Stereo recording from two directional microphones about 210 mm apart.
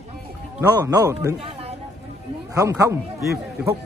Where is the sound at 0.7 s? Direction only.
15° right (ahead or behind).